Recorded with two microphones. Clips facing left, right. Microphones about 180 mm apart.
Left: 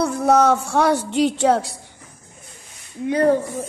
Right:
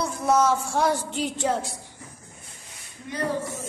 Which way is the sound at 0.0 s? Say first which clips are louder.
Left 6 dB; 65° left (ahead or behind).